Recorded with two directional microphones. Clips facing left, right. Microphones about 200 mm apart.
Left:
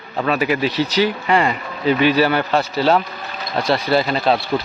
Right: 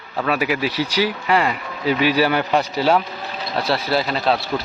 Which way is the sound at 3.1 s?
25° right (ahead or behind).